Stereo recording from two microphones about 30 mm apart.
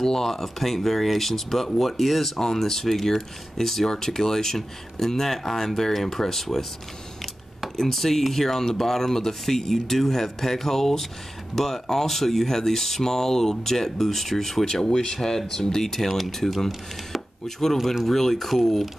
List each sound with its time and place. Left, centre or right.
0.0 s speech: centre
7.7 s speech: centre
15.9 s speech: centre
16.4 s speech: centre
18.0 s speech: centre